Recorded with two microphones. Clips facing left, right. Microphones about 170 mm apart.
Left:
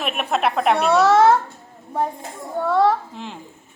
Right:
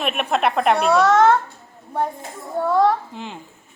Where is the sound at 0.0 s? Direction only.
Centre (ahead or behind).